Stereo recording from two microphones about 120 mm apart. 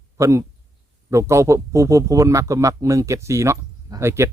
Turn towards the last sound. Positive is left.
turn(degrees=-20)  # may be behind; listen again after turning